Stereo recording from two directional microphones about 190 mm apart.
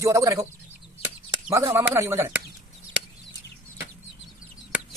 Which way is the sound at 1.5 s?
15° right (ahead or behind).